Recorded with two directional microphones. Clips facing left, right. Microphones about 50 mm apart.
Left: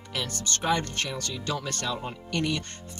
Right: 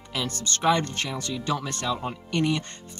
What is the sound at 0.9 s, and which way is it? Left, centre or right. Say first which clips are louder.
Speech: right 2 dB; right.